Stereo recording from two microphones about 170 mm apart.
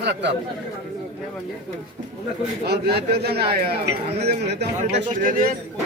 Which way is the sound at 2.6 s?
70° right (ahead or behind).